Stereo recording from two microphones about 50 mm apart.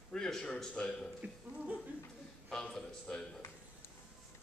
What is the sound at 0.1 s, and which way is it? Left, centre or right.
Speech, centre.